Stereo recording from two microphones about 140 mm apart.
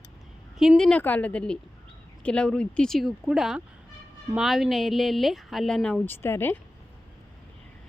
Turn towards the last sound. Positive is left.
turn(degrees=15)  # may be behind; listen again after turning